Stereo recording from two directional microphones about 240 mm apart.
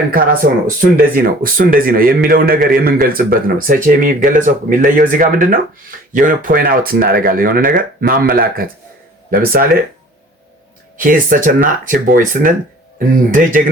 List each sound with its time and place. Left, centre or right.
0.4 s a man's voice: right
10.9 s a man's voice: right